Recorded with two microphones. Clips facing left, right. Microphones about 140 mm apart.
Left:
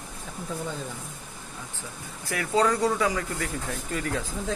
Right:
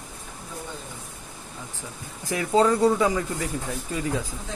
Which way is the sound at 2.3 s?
25° right (ahead or behind).